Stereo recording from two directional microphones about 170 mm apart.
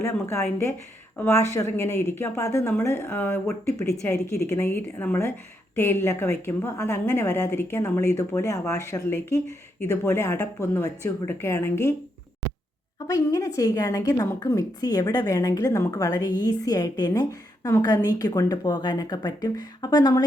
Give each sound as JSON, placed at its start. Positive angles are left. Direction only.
{"t": 0.0, "sound": "a woman's voice", "side_deg": 15}
{"t": 13.1, "sound": "a woman's voice", "side_deg": 20}